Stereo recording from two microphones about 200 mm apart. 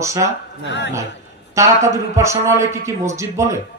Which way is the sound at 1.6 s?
15° right (ahead or behind).